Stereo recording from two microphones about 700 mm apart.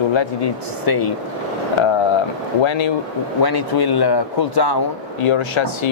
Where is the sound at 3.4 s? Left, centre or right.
Left.